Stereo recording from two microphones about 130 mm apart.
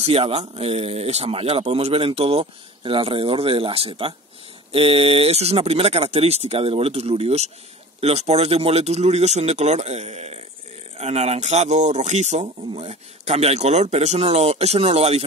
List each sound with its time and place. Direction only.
0.0 s speech: 50° right (ahead or behind)